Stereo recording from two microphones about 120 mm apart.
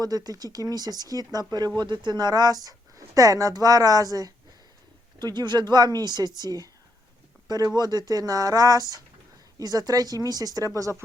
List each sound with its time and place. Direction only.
0.0 s speech: 35° right (ahead or behind)